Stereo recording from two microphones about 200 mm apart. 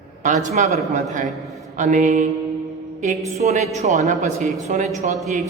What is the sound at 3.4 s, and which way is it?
A man's voice, 35° right (ahead or behind).